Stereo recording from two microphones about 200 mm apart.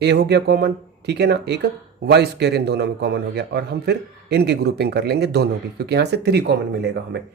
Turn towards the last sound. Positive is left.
turn(degrees=-55)  # may be behind; listen again after turning